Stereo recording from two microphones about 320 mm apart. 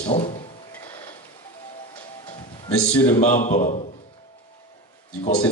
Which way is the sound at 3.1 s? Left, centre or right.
Centre.